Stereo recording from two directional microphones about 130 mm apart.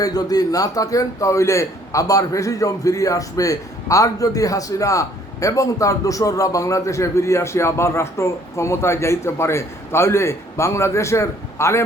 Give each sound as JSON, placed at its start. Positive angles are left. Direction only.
{"t": 0.0, "sound": "a man's voice", "side_deg": 30}